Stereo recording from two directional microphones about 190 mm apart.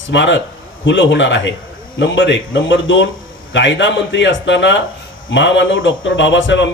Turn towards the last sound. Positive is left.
turn(degrees=75)  # may be behind; listen again after turning